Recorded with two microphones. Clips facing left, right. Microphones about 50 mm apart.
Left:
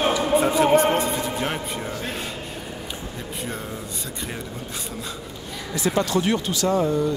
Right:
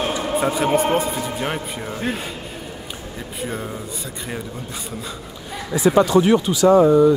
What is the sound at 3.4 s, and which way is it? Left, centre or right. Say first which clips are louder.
Speech: right 5 dB; centre.